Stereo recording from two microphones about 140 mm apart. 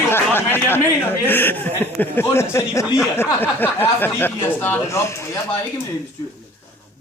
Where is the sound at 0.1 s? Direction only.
15° left (ahead or behind).